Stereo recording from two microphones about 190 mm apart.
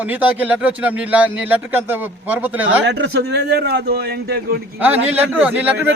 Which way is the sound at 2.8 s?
65° right (ahead or behind).